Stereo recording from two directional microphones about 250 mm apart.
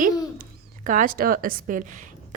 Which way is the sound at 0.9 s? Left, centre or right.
Right.